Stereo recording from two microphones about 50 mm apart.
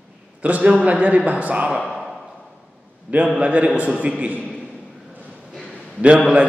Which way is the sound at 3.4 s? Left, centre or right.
Right.